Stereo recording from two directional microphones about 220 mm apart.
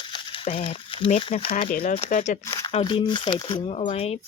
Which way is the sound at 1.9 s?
30° left (ahead or behind).